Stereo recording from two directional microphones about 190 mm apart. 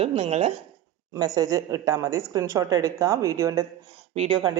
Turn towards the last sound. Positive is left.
turn(degrees=-30)  # may be behind; listen again after turning